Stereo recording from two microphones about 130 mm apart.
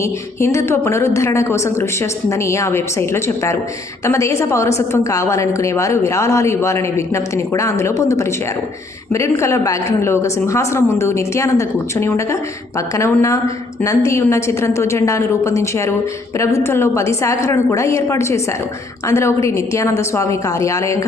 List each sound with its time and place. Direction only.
0.0 s a woman's voice: 20° left (ahead or behind)